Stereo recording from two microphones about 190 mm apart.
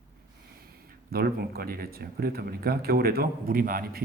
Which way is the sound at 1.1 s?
55° right (ahead or behind).